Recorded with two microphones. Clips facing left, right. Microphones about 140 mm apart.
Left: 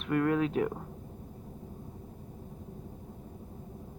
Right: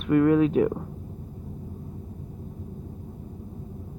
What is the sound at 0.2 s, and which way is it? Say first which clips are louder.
Speech: right 9 dB; 15° right (ahead or behind).